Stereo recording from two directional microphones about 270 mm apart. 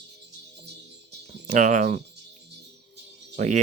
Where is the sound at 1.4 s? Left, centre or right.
Right.